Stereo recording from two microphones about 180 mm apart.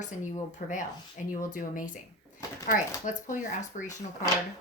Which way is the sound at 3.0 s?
45° left (ahead or behind).